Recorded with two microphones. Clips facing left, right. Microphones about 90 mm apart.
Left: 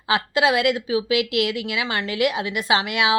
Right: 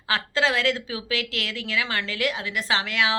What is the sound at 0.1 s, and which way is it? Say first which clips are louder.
A woman's voice: left 4 dB; 15° left (ahead or behind).